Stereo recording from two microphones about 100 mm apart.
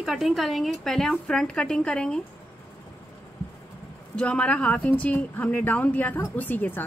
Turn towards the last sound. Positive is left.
turn(degrees=20)  # may be behind; listen again after turning